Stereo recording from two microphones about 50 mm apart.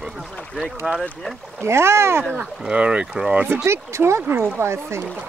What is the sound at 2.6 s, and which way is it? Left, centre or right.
Speech, right.